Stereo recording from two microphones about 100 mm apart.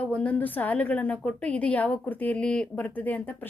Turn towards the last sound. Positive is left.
turn(degrees=15)  # may be behind; listen again after turning